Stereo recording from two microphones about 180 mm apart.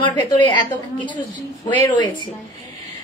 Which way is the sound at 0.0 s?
25° left (ahead or behind).